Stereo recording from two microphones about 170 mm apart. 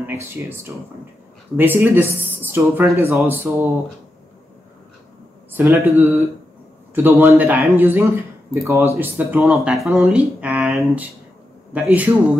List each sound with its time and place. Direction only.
0.0 s speech: 15° right (ahead or behind)
5.5 s speech: 10° right (ahead or behind)